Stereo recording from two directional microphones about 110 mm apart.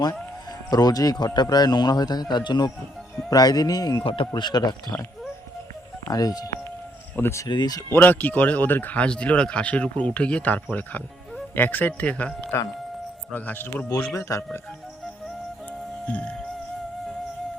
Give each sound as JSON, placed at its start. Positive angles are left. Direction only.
{"t": 0.7, "sound": "a man's voice", "side_deg": 35}
{"t": 4.0, "sound": "speech", "side_deg": 55}
{"t": 4.3, "sound": "a man's voice", "side_deg": 40}
{"t": 6.1, "sound": "a man's voice", "side_deg": 35}
{"t": 7.2, "sound": "speech", "side_deg": 25}
{"t": 7.4, "sound": "a man's voice", "side_deg": 40}
{"t": 7.9, "sound": "speech", "side_deg": 15}
{"t": 14.2, "sound": "speech", "side_deg": 25}
{"t": 16.0, "sound": "speech", "side_deg": 15}